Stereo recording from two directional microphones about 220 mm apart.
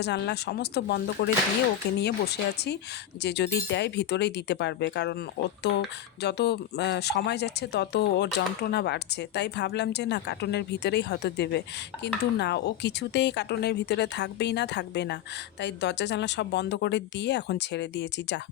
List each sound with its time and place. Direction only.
0.0 s speech: 50° left (ahead or behind)
6.2 s speech: 50° left (ahead or behind)